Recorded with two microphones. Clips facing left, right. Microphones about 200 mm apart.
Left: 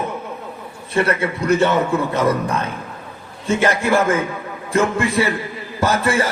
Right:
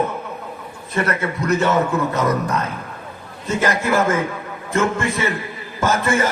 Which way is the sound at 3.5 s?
30° left (ahead or behind).